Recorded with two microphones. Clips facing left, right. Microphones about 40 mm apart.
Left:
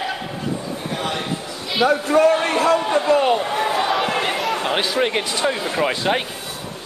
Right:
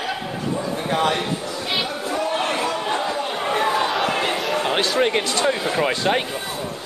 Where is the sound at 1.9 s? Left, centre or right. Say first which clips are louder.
Left 9 dB; left.